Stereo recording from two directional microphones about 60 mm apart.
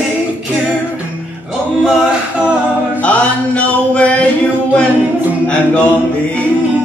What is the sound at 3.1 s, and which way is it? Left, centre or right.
Mantra, centre.